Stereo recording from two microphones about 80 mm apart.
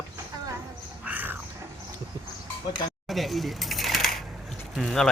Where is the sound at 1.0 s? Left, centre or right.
Right.